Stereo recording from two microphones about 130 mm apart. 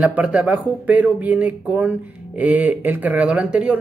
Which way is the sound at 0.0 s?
10° right (ahead or behind).